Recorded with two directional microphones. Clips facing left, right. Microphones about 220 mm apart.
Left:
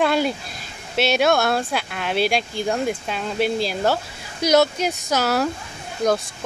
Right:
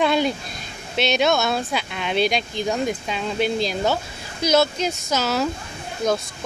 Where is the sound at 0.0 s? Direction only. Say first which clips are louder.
Even; 5° left (ahead or behind).